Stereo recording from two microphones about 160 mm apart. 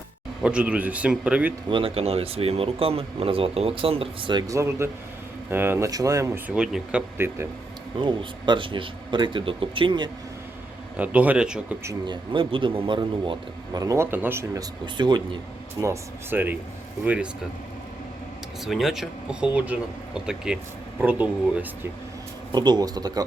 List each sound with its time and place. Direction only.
0.4 s speech: 10° right (ahead or behind)
1.7 s speech: 35° right (ahead or behind); by 7.0 s 5° right (ahead or behind)
7.2 s speech: 15° right (ahead or behind)
7.9 s speech: 30° right (ahead or behind)
10.9 s speech: 10° right (ahead or behind)
12.0 s speech: 30° right (ahead or behind)
13.7 s speech: 20° right (ahead or behind)
14.9 s speech: 30° right (ahead or behind)
15.8 s speech: 15° right (ahead or behind)
18.6 s speech: centre (ahead or behind)
22.5 s speech: 25° right (ahead or behind)